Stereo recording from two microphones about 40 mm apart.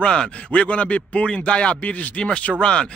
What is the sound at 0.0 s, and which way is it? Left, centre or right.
Speech, centre.